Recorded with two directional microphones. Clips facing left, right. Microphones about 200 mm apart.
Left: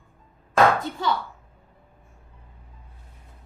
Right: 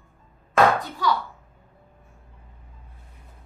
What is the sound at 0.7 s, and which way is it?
Speech, 25° left (ahead or behind).